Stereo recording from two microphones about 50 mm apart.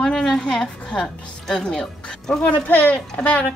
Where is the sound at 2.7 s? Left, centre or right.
Left.